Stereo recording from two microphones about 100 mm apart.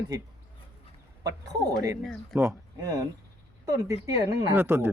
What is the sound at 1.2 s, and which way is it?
A man's voice, 40° right (ahead or behind).